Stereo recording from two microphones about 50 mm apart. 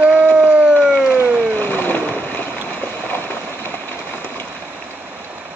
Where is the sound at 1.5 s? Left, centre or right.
Left.